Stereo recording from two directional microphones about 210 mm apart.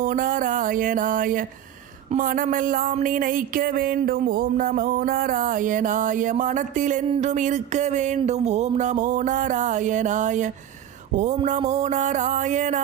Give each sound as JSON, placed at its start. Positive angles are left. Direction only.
{"t": 0.0, "sound": "speech", "side_deg": -40}